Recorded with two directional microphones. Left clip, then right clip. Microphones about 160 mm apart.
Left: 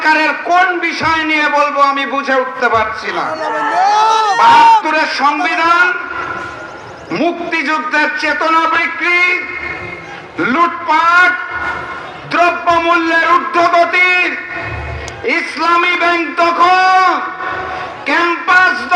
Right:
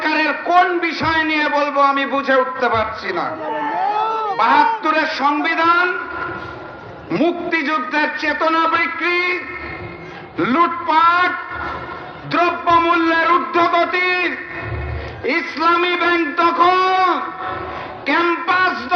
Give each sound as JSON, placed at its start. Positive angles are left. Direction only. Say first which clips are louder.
{"t": 0.0, "sound": "a man's voice", "louder": "left 6 dB", "side_deg": 20}
{"t": 3.4, "sound": "speech", "louder": "left 9 dB", "side_deg": 60}
{"t": 4.0, "sound": "a sound", "louder": "left 8 dB", "side_deg": 25}
{"t": 4.8, "sound": "a man's voice", "louder": "left 4 dB", "side_deg": 25}
{"t": 7.1, "sound": "a man's voice", "louder": "left 2 dB", "side_deg": 20}